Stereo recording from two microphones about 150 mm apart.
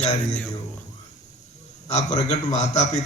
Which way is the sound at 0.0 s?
50° left (ahead or behind).